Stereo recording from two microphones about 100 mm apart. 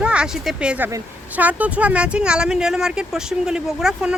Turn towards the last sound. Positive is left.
turn(degrees=-5)  # may be behind; listen again after turning